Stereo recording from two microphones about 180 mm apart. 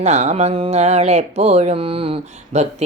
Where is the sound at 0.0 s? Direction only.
40° right (ahead or behind).